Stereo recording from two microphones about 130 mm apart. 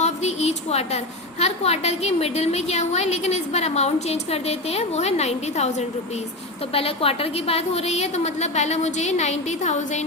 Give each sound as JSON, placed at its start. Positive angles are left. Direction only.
{"t": 0.0, "sound": "a woman's voice", "side_deg": 60}
{"t": 6.7, "sound": "a woman's voice", "side_deg": 50}